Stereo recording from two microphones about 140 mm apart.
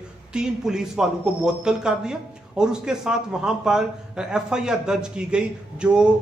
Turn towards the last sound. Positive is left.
turn(degrees=-5)  # may be behind; listen again after turning